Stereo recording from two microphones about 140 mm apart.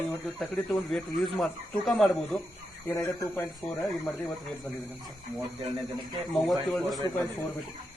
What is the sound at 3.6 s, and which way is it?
Speech, centre (ahead or behind).